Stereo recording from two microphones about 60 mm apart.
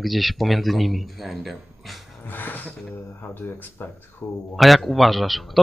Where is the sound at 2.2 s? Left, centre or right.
Left.